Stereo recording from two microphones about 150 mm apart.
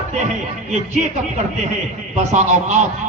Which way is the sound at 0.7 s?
50° right (ahead or behind).